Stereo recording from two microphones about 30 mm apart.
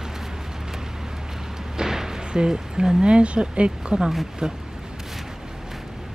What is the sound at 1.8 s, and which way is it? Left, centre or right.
Speech, centre.